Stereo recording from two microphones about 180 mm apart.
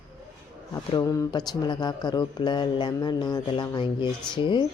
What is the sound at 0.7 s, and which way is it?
Speech, 20° left (ahead or behind).